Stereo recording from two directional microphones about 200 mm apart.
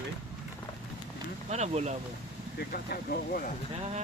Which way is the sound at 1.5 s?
35° right (ahead or behind).